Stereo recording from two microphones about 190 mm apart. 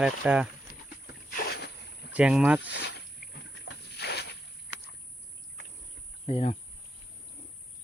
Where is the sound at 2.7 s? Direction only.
60° left (ahead or behind).